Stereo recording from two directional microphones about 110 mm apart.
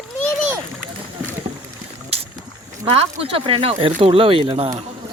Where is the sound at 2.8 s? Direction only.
60° right (ahead or behind).